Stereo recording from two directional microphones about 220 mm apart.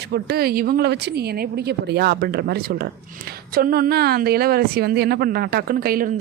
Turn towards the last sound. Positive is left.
turn(degrees=-40)  # may be behind; listen again after turning